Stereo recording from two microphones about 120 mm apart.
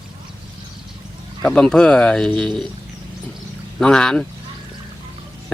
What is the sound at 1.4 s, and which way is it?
Speech, 5° left (ahead or behind).